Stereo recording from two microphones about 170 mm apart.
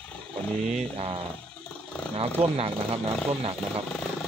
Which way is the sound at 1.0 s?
35° right (ahead or behind).